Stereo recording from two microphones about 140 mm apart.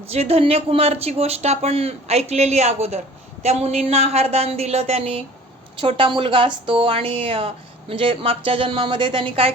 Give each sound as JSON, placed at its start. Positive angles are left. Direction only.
{"t": 0.1, "sound": "speech", "side_deg": -45}